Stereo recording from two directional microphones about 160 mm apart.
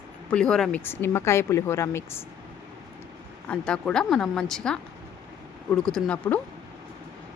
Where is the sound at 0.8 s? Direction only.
15° left (ahead or behind).